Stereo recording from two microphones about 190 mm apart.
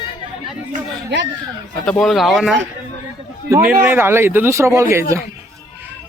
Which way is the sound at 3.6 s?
10° right (ahead or behind).